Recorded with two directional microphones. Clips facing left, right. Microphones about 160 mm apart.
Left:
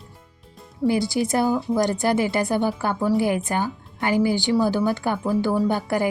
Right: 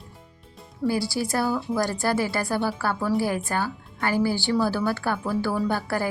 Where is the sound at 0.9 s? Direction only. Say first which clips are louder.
Left 4 dB; 20° left (ahead or behind).